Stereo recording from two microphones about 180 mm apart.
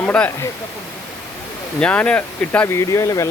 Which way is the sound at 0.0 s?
5° left (ahead or behind).